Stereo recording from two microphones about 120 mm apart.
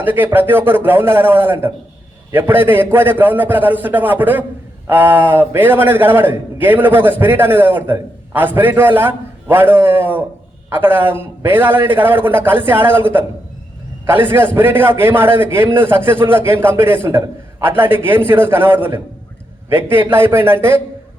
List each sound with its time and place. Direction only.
0.0 s a man's voice: 15° right (ahead or behind)